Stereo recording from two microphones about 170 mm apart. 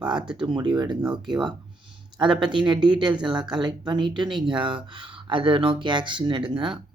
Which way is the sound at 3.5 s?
25° right (ahead or behind).